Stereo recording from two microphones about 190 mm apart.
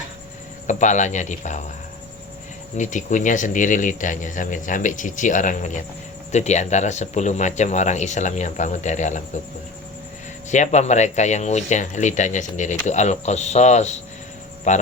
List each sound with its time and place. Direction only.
0.7 s speech: 40° left (ahead or behind)
2.7 s speech: 40° left (ahead or behind)
10.5 s speech: 40° left (ahead or behind)